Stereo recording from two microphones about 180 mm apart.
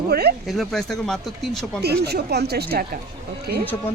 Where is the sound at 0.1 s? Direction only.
60° right (ahead or behind).